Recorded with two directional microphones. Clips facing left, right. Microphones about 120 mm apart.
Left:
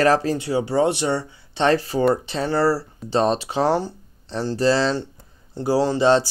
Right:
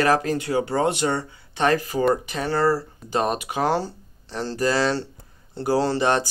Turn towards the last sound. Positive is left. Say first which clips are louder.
# left 3 dB
turn(degrees=20)  # may be behind; listen again after turning